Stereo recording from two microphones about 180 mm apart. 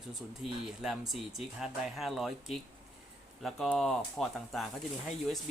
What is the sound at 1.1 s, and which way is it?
Speech, centre (ahead or behind).